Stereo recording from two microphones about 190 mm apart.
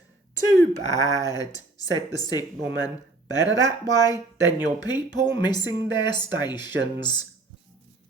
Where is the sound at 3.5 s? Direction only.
20° left (ahead or behind).